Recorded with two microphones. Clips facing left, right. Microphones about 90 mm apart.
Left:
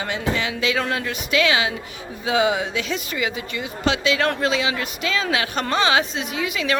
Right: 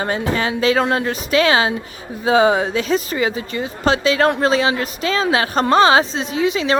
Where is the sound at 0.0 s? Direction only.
40° right (ahead or behind).